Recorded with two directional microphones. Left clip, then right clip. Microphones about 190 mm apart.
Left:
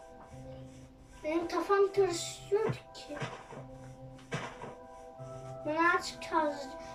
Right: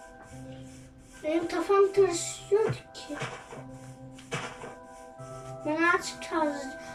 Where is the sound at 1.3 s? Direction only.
20° right (ahead or behind).